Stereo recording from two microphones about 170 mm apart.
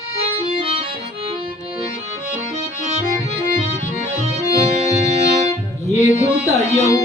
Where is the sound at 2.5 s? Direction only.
40° right (ahead or behind).